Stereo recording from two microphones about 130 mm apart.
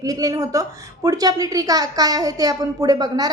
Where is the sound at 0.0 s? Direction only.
30° right (ahead or behind).